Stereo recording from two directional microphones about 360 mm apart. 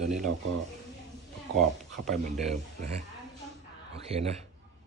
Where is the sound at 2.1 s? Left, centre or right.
Centre.